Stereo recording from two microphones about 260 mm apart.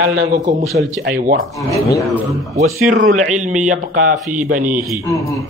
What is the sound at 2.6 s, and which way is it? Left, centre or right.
Speech, right.